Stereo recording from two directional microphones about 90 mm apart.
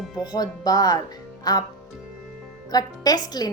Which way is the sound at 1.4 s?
45° left (ahead or behind).